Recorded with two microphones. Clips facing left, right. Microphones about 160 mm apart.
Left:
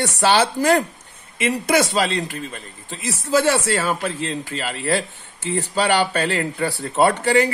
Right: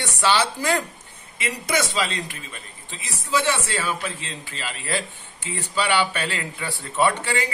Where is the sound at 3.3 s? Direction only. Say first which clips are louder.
Left 6 dB; 45° left (ahead or behind).